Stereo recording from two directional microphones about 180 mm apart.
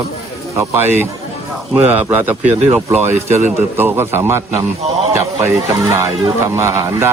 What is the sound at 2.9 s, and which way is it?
Speech, 35° right (ahead or behind).